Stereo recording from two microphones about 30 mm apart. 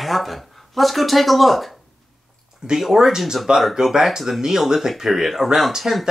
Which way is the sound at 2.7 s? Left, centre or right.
Centre.